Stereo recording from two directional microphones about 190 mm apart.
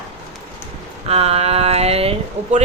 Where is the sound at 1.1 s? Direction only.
30° right (ahead or behind).